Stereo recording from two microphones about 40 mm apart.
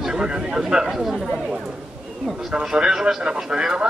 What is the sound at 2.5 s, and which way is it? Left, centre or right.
A man's voice, centre.